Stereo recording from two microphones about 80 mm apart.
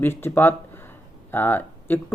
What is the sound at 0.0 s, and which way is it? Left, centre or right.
Speech, left.